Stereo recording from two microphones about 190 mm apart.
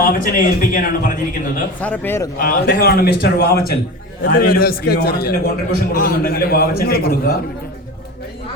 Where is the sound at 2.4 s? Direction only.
50° left (ahead or behind).